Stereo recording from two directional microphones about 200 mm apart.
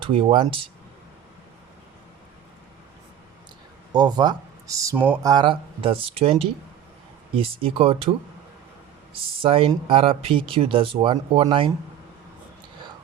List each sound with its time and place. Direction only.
0.0 s speech: 30° right (ahead or behind)
3.9 s speech: 20° right (ahead or behind)
9.4 s speech: 30° right (ahead or behind)